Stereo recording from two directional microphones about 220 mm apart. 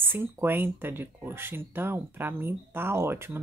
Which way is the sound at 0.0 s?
10° right (ahead or behind).